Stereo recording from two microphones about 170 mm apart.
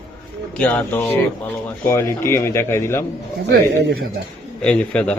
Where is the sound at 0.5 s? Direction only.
10° left (ahead or behind).